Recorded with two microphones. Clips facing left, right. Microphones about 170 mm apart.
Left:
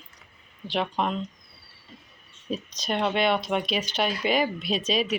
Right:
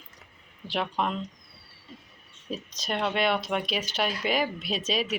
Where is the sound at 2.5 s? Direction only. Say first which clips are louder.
Left 3 dB; 5° right (ahead or behind).